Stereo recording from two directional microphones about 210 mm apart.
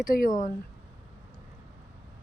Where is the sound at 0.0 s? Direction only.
40° left (ahead or behind).